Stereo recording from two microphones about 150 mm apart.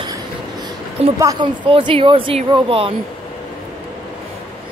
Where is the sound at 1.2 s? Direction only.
20° right (ahead or behind).